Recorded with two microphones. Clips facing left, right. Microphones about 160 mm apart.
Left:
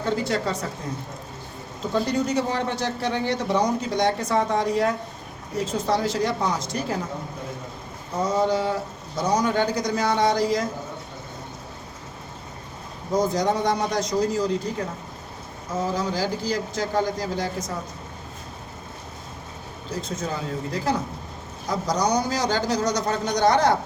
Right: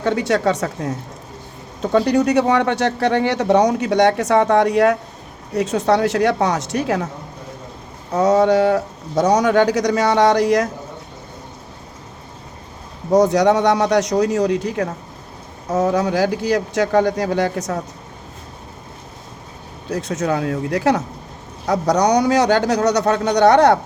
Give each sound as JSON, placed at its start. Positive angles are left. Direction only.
{"t": 0.0, "sound": "a man's voice", "side_deg": -75}
{"t": 8.1, "sound": "a man's voice", "side_deg": -75}
{"t": 13.1, "sound": "a man's voice", "side_deg": -75}
{"t": 19.9, "sound": "a man's voice", "side_deg": -70}